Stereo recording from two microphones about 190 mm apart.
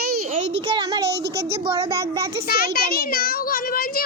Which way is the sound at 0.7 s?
25° right (ahead or behind).